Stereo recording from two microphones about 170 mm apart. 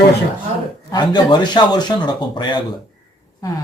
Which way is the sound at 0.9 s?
25° left (ahead or behind).